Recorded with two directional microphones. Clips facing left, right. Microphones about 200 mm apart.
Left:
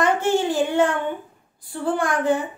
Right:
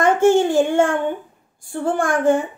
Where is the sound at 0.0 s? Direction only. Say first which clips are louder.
Right 6 dB; 50° right (ahead or behind).